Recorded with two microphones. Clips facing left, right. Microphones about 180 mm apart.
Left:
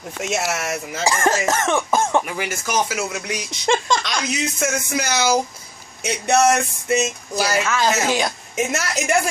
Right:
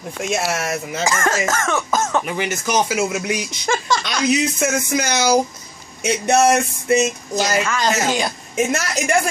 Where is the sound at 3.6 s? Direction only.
20° left (ahead or behind).